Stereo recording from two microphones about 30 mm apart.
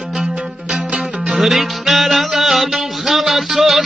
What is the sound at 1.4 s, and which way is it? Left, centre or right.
Music, centre.